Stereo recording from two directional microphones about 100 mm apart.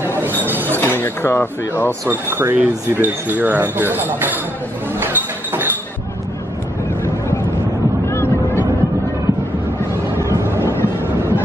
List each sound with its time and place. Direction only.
0.5 s a sound: 20° right (ahead or behind)
0.7 s speech: 20° left (ahead or behind)
2.0 s speech: 20° right (ahead or behind)
5.0 s a sound: 20° right (ahead or behind)
8.1 s boat: 25° left (ahead or behind)
10.2 s boat: 25° right (ahead or behind)